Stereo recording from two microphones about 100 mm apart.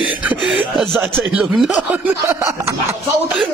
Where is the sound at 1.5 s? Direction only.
10° right (ahead or behind).